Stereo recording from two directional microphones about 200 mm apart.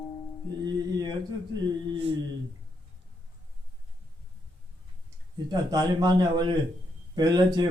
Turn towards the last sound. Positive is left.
turn(degrees=-20)  # may be behind; listen again after turning